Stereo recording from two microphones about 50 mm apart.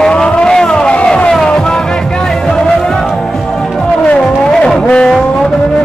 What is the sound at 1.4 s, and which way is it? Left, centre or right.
Music, centre.